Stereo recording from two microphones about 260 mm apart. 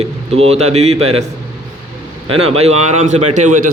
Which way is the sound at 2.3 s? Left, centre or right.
Right.